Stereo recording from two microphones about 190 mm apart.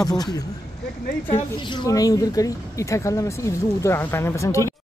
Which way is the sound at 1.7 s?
20° left (ahead or behind).